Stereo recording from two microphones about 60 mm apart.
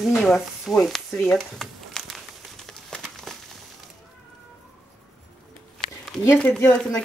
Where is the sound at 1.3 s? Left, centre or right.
Centre.